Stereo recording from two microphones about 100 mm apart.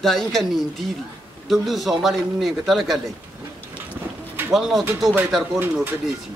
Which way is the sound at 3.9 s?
15° right (ahead or behind).